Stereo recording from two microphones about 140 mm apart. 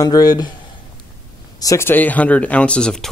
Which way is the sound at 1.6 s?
20° left (ahead or behind).